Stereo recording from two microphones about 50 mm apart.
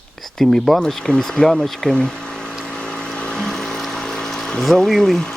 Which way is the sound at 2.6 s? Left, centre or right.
Centre.